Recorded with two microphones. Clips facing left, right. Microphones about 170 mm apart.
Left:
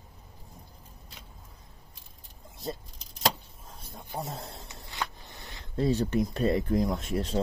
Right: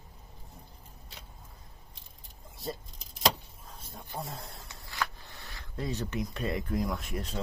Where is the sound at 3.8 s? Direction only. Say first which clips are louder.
Left 3 dB; 20° left (ahead or behind).